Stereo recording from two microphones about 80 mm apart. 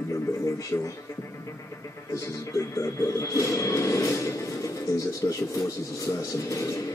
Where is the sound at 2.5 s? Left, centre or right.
Left.